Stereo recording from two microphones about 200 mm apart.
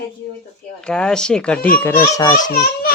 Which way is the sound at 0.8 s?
5° left (ahead or behind).